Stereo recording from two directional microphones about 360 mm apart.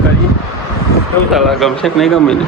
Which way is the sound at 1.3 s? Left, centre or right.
Centre.